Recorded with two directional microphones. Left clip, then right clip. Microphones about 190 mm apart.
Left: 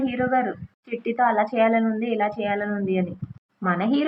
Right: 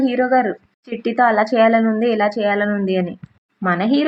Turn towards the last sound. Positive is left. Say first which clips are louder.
# right 5 dB
turn(degrees=-40)  # may be behind; listen again after turning